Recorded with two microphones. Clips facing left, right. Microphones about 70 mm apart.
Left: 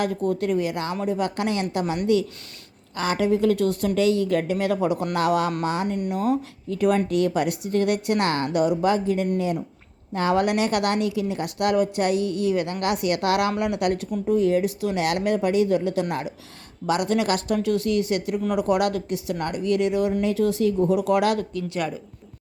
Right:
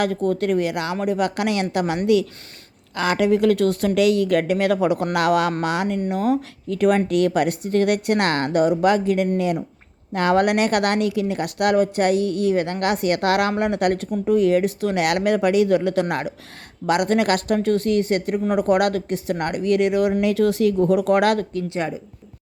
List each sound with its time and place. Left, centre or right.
0.0 s speech: right
2.9 s speech: right
6.1 s speech: right
8.8 s speech: right
20.8 s speech: right
21.7 s speech: right